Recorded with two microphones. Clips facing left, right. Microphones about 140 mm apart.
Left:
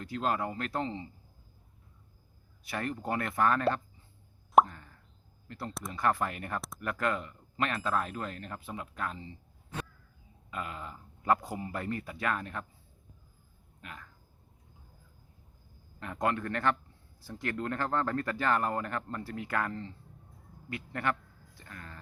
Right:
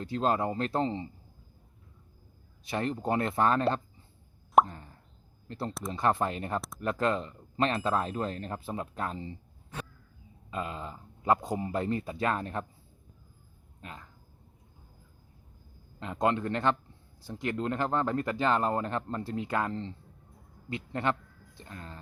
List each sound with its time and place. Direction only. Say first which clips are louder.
0.0 s speech: right 4 dB; 25° right (ahead or behind)
2.6 s speech: right 4 dB; 25° right (ahead or behind)
4.7 s plop: right 5 dB; 30° right (ahead or behind)
5.5 s speech: right 4 dB; 30° right (ahead or behind)
10.5 s speech: right 3 dB; 25° right (ahead or behind)
13.8 s speech: right 2 dB; 25° right (ahead or behind)
16.0 s speech: right 3 dB; 20° right (ahead or behind)
20.7 s a sound: right 3 dB; 25° right (ahead or behind)